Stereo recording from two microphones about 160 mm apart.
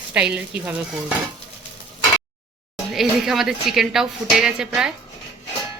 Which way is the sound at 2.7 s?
Centre (ahead or behind).